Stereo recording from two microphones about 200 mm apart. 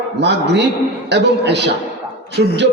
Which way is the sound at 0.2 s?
60° right (ahead or behind).